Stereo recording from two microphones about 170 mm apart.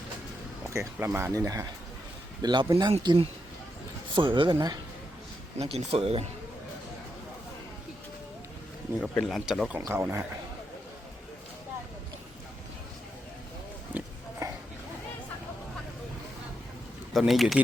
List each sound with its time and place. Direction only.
0.7 s speech: 15° right (ahead or behind)
5.5 s speech: 35° right (ahead or behind)
9.0 s speech: centre (ahead or behind)
13.9 s oink: 15° right (ahead or behind)
17.2 s speech: centre (ahead or behind)